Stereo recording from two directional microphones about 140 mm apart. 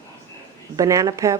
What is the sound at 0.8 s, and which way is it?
Speech, 25° right (ahead or behind).